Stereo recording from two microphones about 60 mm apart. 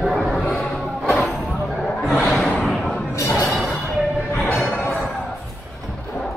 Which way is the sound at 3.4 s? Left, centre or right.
Centre.